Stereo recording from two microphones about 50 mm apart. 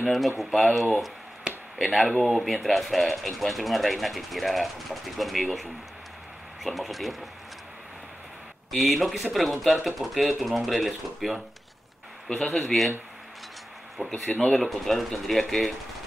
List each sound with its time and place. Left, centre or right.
0.0 s speech: centre
2.2 s speech: centre
8.7 s speech: centre
14.0 s speech: left
14.5 s speech: centre